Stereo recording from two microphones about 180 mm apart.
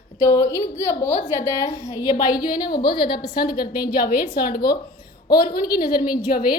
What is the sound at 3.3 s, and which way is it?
A woman's voice, 55° left (ahead or behind).